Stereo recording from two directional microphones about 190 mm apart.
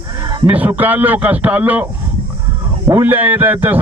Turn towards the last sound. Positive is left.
turn(degrees=-10)  # may be behind; listen again after turning